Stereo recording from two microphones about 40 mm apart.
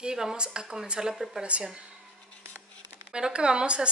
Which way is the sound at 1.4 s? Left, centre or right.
Right.